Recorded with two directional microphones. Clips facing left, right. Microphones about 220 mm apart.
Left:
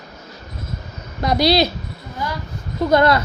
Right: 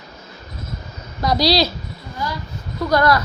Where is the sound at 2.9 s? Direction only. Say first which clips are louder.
Left 2 dB; 25° left (ahead or behind).